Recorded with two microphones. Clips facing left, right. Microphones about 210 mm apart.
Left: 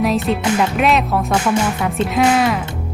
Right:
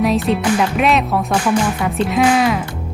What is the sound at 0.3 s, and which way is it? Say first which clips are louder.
Speech: right 1 dB; 5° right (ahead or behind).